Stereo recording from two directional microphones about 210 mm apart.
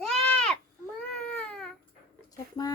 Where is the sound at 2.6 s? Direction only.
20° left (ahead or behind).